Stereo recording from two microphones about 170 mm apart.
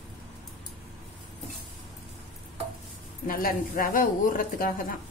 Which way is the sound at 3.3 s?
55° left (ahead or behind).